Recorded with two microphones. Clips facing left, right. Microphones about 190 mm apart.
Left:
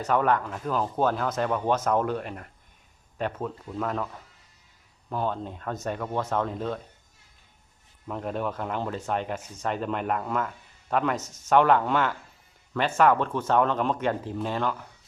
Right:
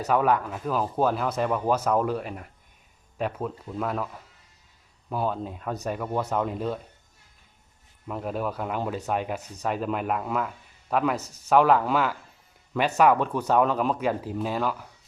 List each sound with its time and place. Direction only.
0.1 s speech: 5° right (ahead or behind)
8.0 s speech: 5° right (ahead or behind)
11.2 s speech: 35° right (ahead or behind)
11.4 s speech: 5° right (ahead or behind)